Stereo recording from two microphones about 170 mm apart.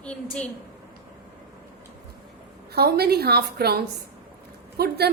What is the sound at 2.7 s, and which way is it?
A woman's voice, 70° right (ahead or behind).